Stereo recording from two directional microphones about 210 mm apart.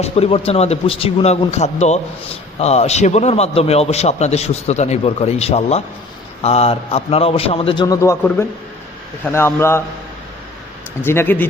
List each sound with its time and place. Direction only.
0.0 s a man's voice: 25° left (ahead or behind); by 9.8 s 10° left (ahead or behind)
11.0 s speech: 10° left (ahead or behind)